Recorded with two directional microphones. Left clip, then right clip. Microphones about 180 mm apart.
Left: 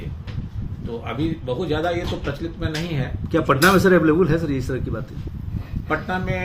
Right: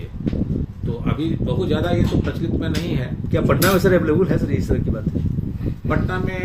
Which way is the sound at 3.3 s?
25° left (ahead or behind).